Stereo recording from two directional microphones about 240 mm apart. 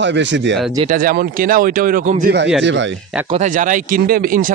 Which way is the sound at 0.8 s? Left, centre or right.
Right.